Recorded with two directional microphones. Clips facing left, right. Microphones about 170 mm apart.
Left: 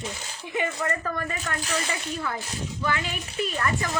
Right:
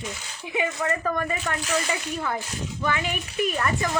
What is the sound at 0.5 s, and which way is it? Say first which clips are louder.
Speech: right 2 dB; 15° right (ahead or behind).